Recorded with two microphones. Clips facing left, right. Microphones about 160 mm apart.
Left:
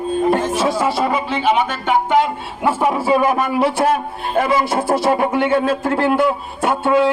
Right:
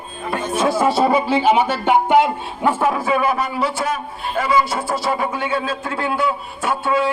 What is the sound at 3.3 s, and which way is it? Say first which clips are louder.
A man's voice: left 4 dB; 55° left (ahead or behind).